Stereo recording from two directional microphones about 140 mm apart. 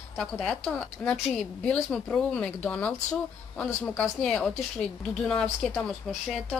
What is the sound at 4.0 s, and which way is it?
A woman's voice, 10° left (ahead or behind).